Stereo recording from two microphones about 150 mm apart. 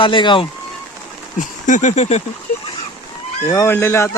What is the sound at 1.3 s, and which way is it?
Speech, 55° left (ahead or behind).